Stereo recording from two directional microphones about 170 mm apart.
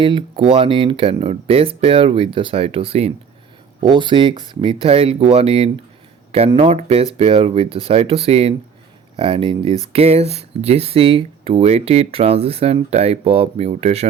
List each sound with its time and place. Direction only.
0.0 s speech: 30° right (ahead or behind)